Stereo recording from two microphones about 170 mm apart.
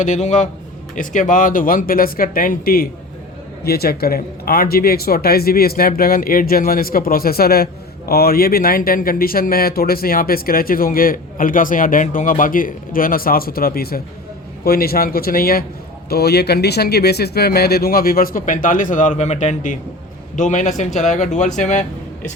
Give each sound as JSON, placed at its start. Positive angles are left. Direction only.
{"t": 0.0, "sound": "speech", "side_deg": 45}